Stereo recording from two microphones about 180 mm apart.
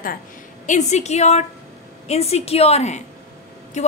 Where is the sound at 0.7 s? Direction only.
40° left (ahead or behind).